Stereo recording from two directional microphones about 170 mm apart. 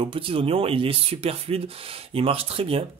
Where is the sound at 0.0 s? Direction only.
30° right (ahead or behind).